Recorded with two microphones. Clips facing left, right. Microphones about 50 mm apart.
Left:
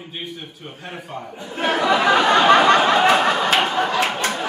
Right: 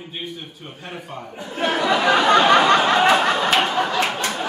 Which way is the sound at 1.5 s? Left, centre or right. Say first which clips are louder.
Left 1 dB; centre.